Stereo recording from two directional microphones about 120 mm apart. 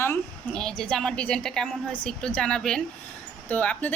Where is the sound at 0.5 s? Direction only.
5° left (ahead or behind).